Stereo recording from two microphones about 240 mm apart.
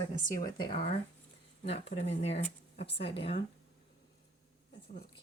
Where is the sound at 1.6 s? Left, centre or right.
Left.